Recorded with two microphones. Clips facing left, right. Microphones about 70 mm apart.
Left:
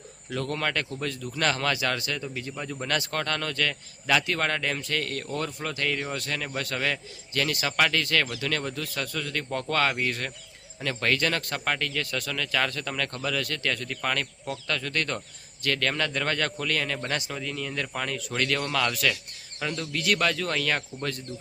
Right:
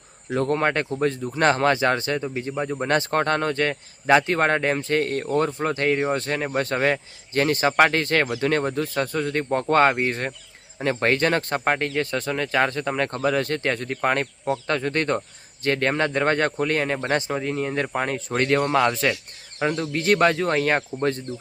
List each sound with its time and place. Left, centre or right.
0.3 s speech: right